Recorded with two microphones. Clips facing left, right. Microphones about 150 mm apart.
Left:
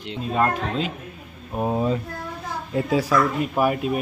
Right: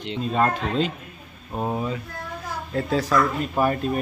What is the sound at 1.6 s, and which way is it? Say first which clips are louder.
Speech: left 4 dB; 15° left (ahead or behind).